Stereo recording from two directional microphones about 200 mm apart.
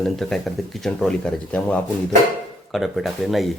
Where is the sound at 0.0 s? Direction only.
Centre (ahead or behind).